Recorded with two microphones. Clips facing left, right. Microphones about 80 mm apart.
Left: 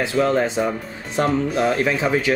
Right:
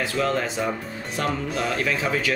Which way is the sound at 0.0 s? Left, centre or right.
Left.